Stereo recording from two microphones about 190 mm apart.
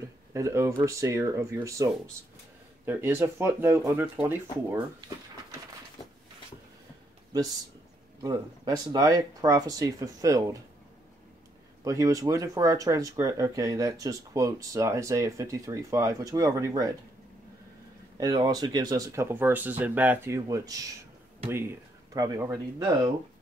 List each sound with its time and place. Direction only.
0.3 s speech: 15° right (ahead or behind)
8.2 s speech: 20° right (ahead or behind)
11.8 s speech: 15° right (ahead or behind)
18.1 s speech: 20° right (ahead or behind)